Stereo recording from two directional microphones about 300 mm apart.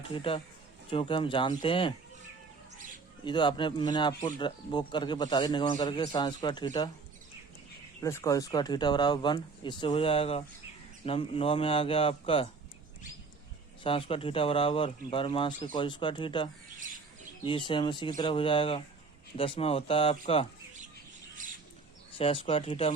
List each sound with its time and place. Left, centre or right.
0.1 s a man's voice: centre
3.2 s a man's voice: centre
8.0 s a man's voice: centre
13.8 s a man's voice: centre
17.7 s a man's voice: centre
22.2 s speech: centre